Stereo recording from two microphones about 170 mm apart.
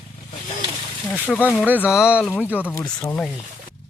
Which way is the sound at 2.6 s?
15° left (ahead or behind).